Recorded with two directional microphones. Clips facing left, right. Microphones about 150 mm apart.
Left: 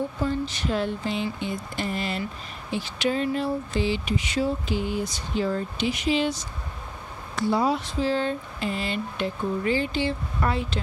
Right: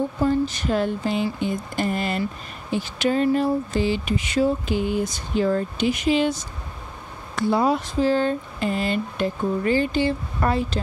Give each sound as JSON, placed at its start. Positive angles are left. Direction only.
{"t": 0.2, "sound": "speech", "side_deg": -45}